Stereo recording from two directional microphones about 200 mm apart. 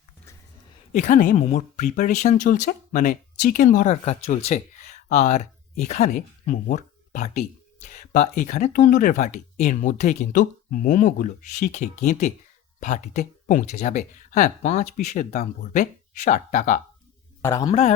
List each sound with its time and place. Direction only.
0.9 s speech: 40° left (ahead or behind)
17.4 s a man's voice: 15° left (ahead or behind)
17.7 s speech: 30° left (ahead or behind)